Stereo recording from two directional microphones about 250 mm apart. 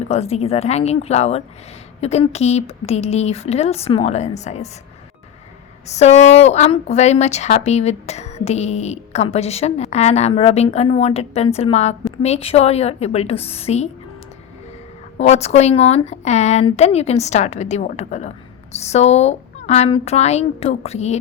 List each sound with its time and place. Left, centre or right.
0.1 s a woman's voice: left
5.8 s a woman's voice: left
15.2 s a woman's voice: left